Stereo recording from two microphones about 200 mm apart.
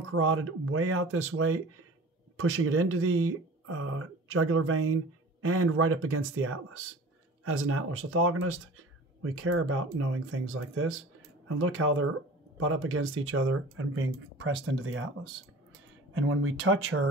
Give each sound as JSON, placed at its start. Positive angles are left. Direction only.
{"t": 0.1, "sound": "speech", "side_deg": -90}
{"t": 16.1, "sound": "speech", "side_deg": -90}